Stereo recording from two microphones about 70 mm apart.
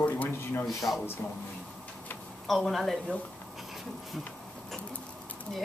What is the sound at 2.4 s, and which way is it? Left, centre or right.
Speech, centre.